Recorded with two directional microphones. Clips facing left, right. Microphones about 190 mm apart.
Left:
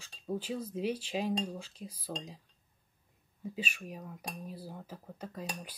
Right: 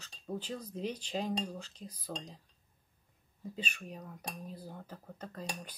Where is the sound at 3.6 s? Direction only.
10° left (ahead or behind).